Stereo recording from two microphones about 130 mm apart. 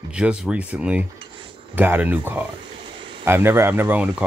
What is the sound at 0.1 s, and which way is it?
Speech, 10° right (ahead or behind).